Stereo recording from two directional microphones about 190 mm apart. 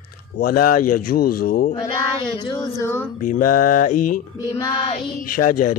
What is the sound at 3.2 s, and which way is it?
Speech, 45° left (ahead or behind).